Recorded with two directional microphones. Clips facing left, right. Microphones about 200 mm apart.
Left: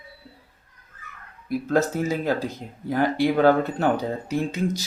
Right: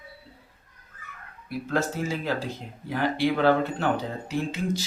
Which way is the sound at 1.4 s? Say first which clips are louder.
Left 5 dB; 45° left (ahead or behind).